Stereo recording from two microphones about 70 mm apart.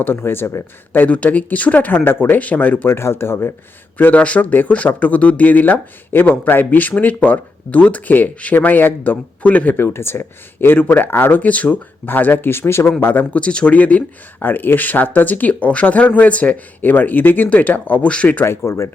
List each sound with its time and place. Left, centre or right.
0.0 s speech: left
0.9 s speech: left
3.9 s speech: left
9.7 s speech: left
13.3 s speech: centre
18.4 s speech: left